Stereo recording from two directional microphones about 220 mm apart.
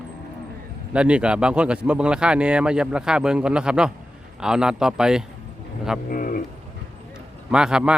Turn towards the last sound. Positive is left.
turn(degrees=-5)  # may be behind; listen again after turning